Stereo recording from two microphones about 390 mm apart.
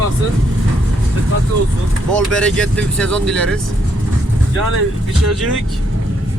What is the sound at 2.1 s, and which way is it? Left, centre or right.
Speech, centre.